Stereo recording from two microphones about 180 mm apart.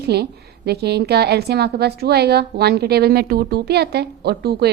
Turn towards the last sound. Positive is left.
turn(degrees=-65)  # may be behind; listen again after turning